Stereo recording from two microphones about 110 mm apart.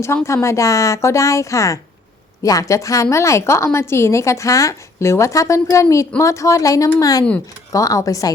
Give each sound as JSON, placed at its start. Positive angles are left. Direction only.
{"t": 0.0, "sound": "a woman's voice", "side_deg": 25}